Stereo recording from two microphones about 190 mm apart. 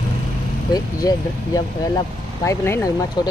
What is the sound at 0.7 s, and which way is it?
Speech, 20° left (ahead or behind).